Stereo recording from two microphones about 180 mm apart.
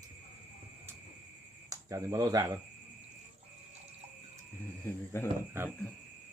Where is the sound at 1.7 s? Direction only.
15° right (ahead or behind).